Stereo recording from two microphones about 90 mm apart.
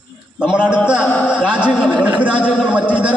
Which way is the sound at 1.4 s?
15° right (ahead or behind).